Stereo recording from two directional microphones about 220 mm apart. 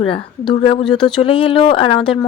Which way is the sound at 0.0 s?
25° left (ahead or behind).